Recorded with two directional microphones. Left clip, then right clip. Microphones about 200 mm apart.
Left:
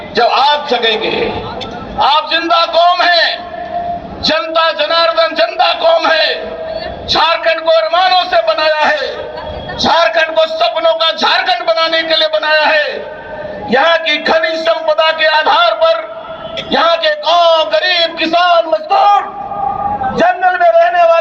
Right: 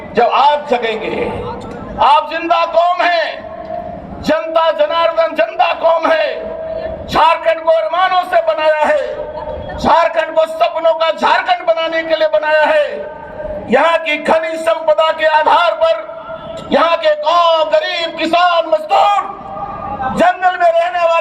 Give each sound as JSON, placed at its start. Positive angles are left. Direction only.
{"t": 0.2, "sound": "a man's voice", "side_deg": -65}